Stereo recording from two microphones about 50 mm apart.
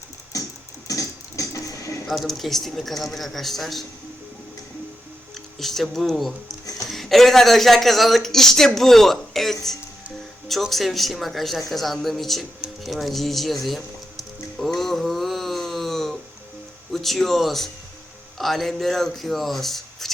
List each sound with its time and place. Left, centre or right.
1.4 s a sound: left
2.0 s speech: centre
5.5 s speech: centre
12.8 s music: centre
16.9 s speech: centre